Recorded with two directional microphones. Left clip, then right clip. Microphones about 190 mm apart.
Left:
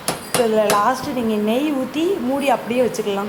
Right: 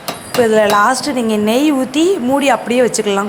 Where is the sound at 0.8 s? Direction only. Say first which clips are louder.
Right 5 dB; 25° right (ahead or behind).